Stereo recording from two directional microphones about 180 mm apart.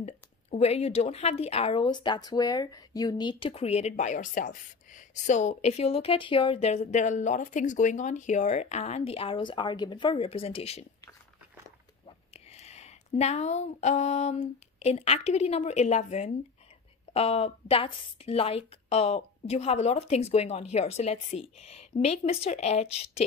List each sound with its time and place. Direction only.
0.0 s a woman's voice: 35° left (ahead or behind)
12.5 s a woman's voice: 35° left (ahead or behind)